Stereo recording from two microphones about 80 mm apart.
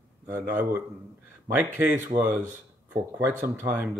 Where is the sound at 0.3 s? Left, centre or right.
Right.